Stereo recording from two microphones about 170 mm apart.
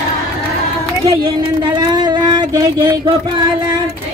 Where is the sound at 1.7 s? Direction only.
25° right (ahead or behind).